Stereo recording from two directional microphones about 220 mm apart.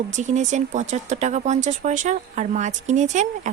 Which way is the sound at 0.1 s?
30° right (ahead or behind).